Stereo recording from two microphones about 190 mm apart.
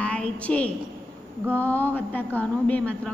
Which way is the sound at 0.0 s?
5° left (ahead or behind).